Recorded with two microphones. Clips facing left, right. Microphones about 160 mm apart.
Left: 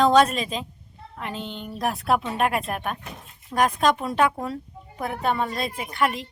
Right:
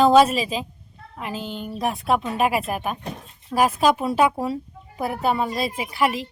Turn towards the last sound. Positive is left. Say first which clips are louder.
# right 2 dB
turn(degrees=-5)  # may be behind; listen again after turning